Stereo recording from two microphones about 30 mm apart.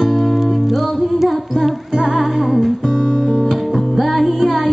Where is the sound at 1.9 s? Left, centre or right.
Centre.